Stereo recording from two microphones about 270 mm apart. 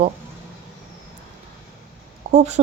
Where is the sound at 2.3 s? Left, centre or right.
Right.